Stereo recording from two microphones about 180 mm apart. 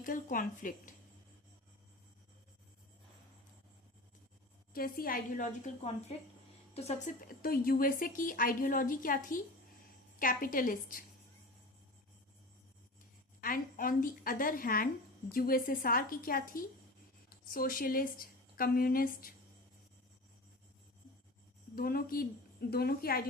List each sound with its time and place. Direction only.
0.0 s a woman's voice: 50° left (ahead or behind)
4.7 s a woman's voice: 55° left (ahead or behind)
13.4 s a woman's voice: 50° left (ahead or behind)
21.8 s speech: 55° left (ahead or behind)